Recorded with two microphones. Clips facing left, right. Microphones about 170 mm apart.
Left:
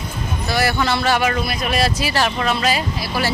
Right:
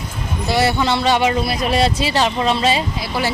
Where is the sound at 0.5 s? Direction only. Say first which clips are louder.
Right 2 dB; 25° right (ahead or behind).